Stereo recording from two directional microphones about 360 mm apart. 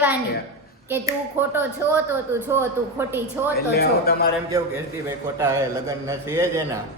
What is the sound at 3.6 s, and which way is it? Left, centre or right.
Speech, left.